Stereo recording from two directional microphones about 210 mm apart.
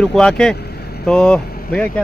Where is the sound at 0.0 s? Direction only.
5° left (ahead or behind).